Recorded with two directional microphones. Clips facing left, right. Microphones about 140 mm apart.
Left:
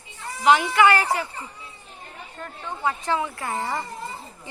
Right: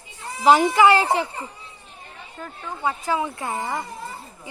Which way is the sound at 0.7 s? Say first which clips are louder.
Right 2 dB; 25° right (ahead or behind).